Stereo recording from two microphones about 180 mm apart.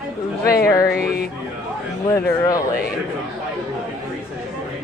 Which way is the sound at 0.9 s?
60° left (ahead or behind).